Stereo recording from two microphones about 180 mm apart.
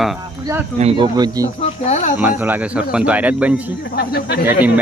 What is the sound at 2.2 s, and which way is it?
Speech, 10° right (ahead or behind).